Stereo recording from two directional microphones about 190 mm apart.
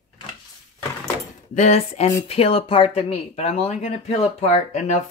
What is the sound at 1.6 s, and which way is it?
Speech, 35° left (ahead or behind).